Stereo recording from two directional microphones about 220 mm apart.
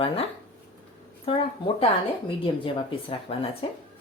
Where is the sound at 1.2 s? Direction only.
25° left (ahead or behind).